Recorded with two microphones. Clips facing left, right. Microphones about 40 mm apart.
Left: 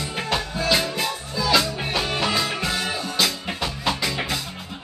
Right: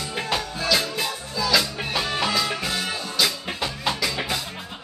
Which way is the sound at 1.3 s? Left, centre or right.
Left.